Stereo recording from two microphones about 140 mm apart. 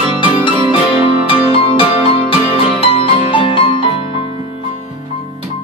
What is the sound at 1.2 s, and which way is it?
Music, 40° left (ahead or behind).